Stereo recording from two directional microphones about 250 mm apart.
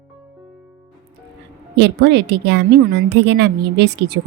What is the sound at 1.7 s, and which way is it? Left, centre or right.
A woman's voice, right.